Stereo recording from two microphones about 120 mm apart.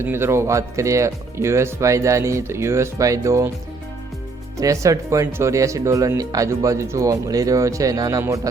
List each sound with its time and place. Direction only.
0.0 s speech: 20° right (ahead or behind)
4.5 s speech: 25° right (ahead or behind)